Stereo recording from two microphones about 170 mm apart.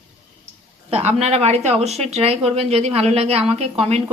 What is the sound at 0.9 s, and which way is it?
Speech, 40° right (ahead or behind).